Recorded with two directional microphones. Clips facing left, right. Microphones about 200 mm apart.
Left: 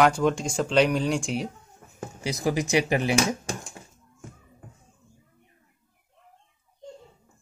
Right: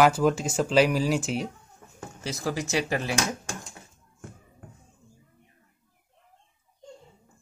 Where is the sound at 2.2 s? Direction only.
15° left (ahead or behind).